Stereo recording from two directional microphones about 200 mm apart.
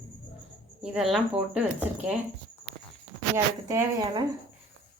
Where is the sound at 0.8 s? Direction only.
5° right (ahead or behind).